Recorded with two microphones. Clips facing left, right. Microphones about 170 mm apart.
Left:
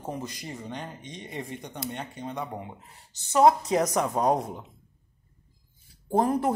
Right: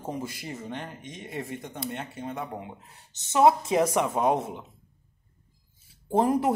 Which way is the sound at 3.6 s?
25° right (ahead or behind).